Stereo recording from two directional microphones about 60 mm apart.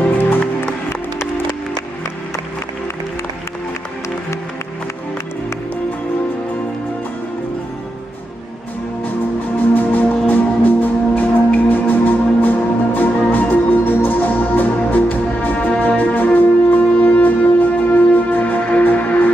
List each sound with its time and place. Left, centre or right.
9.8 s music: left